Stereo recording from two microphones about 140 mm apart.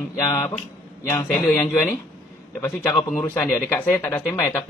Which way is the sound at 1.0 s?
20° left (ahead or behind).